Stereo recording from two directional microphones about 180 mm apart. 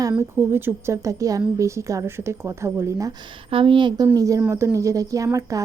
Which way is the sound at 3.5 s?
30° right (ahead or behind).